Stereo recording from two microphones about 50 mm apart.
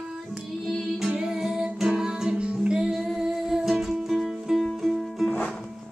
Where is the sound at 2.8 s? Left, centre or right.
Centre.